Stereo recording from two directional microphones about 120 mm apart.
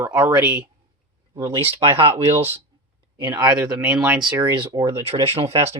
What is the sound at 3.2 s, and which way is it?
Speech, 35° right (ahead or behind).